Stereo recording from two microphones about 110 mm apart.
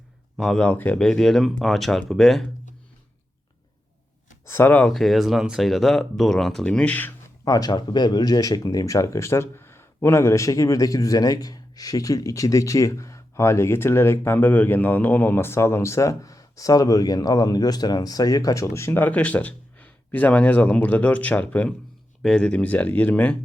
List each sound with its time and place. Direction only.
0.3 s a man's voice: 5° left (ahead or behind)
4.4 s speech: 20° left (ahead or behind)
4.9 s a man's voice: centre (ahead or behind)
7.4 s a man's voice: 35° left (ahead or behind); by 23.4 s 15° left (ahead or behind)